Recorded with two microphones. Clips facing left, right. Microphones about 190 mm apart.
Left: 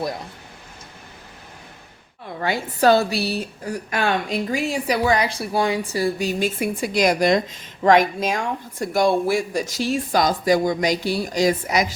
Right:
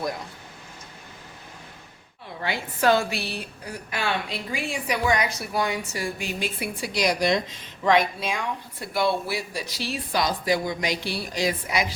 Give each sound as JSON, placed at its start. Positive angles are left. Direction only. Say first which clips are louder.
{"t": 2.4, "sound": "a woman's voice", "louder": "left 5 dB", "side_deg": 40}